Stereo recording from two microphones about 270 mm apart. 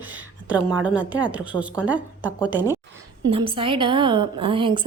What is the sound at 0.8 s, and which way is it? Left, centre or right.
A woman's voice, centre.